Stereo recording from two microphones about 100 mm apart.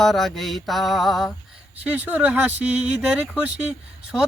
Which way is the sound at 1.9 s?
15° right (ahead or behind).